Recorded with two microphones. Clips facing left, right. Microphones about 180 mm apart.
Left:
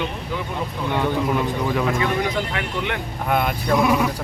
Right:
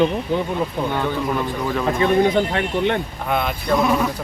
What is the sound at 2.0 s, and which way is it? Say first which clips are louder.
Speech: right 6 dB; 30° right (ahead or behind).